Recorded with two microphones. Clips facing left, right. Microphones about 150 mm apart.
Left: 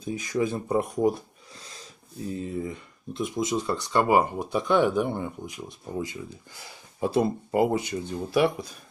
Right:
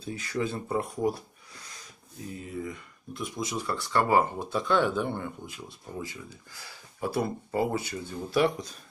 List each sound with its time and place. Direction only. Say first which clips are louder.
0.0 s speech: left 4 dB; 15° left (ahead or behind)